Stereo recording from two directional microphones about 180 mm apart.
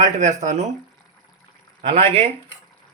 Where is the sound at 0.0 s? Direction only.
40° right (ahead or behind).